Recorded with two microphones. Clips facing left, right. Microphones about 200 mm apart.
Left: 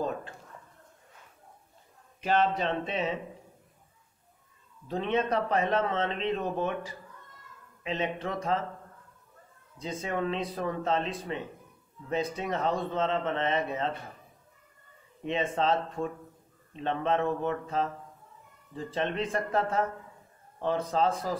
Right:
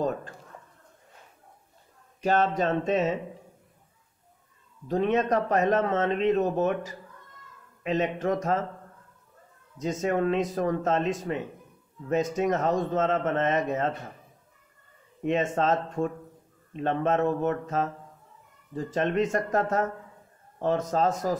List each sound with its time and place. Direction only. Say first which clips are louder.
2.2 s a man's voice: right 3 dB; 45° right (ahead or behind)
4.8 s a man's voice: right 4 dB; 40° right (ahead or behind)
9.8 s a man's voice: right 6 dB; 45° right (ahead or behind)
15.2 s a man's voice: right 3 dB; 45° right (ahead or behind)
19.1 s a man's voice: right 5 dB; 45° right (ahead or behind)